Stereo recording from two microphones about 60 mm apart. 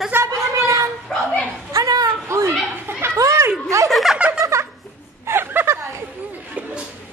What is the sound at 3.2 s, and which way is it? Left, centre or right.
Chatter, right.